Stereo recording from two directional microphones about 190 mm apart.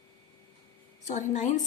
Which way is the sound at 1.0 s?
40° left (ahead or behind).